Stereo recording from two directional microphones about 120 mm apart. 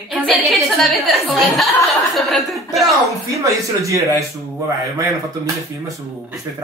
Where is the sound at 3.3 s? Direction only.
25° right (ahead or behind).